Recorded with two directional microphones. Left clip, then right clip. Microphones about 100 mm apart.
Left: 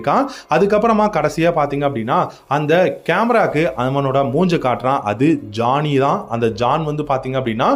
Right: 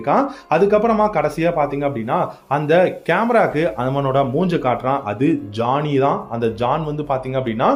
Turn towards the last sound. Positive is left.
turn(degrees=30)  # may be behind; listen again after turning